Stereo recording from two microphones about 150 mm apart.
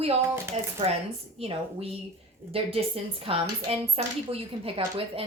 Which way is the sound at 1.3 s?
40° right (ahead or behind).